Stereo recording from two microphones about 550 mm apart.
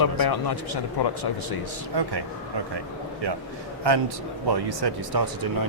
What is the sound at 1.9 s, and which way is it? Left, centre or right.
A man's voice, right.